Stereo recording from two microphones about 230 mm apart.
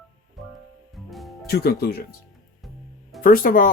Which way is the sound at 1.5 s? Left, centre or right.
Left.